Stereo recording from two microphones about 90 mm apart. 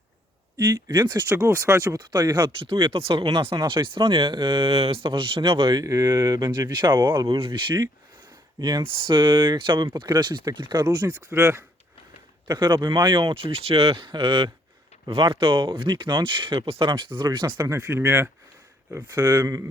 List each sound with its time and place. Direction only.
0.5 s speech: 50° right (ahead or behind)
1.3 s speech: 35° right (ahead or behind)
2.0 s speech: 50° right (ahead or behind)
2.6 s speech: 80° right
3.7 s speech: 65° right (ahead or behind)
5.7 s speech: 40° right (ahead or behind); by 7.2 s 60° right (ahead or behind)
7.3 s speech: 70° right (ahead or behind)
10.9 s speech: 40° right (ahead or behind)
12.5 s speech: 55° right (ahead or behind)
13.3 s speech: 90° right; by 14.5 s 70° right (ahead or behind)
15.1 s speech: 85° right; by 17.7 s 60° right (ahead or behind)
17.7 s speech: 35° right (ahead or behind)
19.5 s speech: 40° right (ahead or behind)